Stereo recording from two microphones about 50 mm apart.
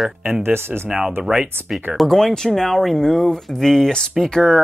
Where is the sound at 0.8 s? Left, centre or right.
Centre.